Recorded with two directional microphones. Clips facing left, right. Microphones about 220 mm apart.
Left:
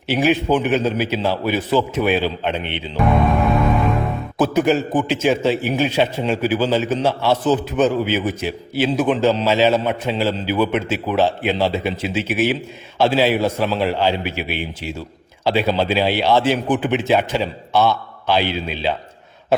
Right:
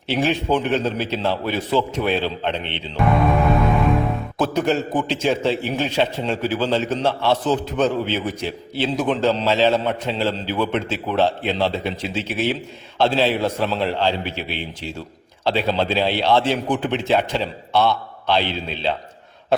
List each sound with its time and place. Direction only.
0.1 s speech: 5° left (ahead or behind)
3.0 s speech: centre (ahead or behind)